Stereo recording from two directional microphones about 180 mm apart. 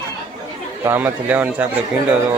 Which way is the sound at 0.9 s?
10° right (ahead or behind).